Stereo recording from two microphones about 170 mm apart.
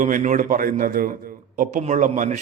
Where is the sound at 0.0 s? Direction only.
50° right (ahead or behind).